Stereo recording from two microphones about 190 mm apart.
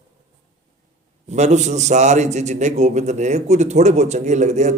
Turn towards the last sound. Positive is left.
turn(degrees=-40)  # may be behind; listen again after turning